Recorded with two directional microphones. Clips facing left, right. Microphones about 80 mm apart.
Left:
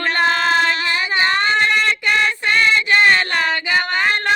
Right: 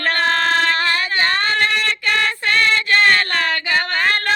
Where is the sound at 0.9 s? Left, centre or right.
Centre.